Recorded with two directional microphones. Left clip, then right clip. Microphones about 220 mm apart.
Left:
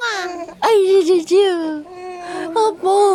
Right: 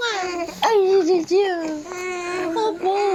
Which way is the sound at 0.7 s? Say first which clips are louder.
Left 4 dB; 60° left (ahead or behind).